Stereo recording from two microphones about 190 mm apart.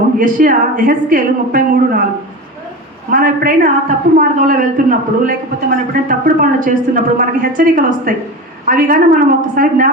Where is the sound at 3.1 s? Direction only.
45° right (ahead or behind).